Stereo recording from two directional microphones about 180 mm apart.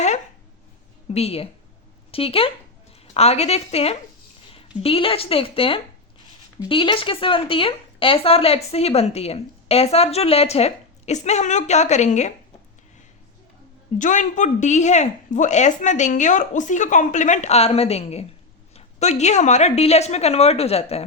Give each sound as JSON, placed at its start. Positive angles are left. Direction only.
{"t": 1.1, "sound": "speech", "side_deg": 35}
{"t": 14.0, "sound": "speech", "side_deg": 45}